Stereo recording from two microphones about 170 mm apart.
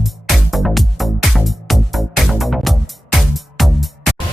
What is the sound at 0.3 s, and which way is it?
Music, centre (ahead or behind).